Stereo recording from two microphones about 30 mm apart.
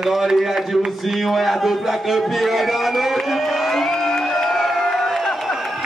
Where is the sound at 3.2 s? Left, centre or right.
Centre.